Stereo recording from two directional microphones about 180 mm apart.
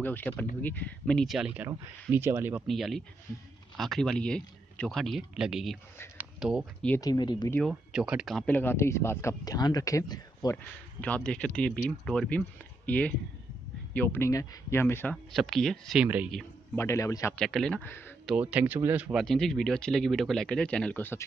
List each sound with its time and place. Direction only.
0.0 s speech: 10° left (ahead or behind); by 2.6 s 10° right (ahead or behind)
2.6 s speech: centre (ahead or behind)
7.0 s speech: 25° left (ahead or behind)
7.5 s speech: centre (ahead or behind); by 10.6 s 20° left (ahead or behind)
11.0 s speech: 5° left (ahead or behind)
15.3 s speech: centre (ahead or behind)
16.7 s speech: 15° left (ahead or behind)
17.4 s speech: 5° left (ahead or behind)
18.2 s speech: 5° right (ahead or behind)
19.2 s speech: centre (ahead or behind)